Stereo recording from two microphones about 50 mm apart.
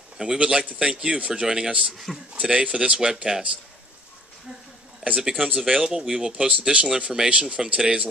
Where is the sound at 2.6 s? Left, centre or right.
Centre.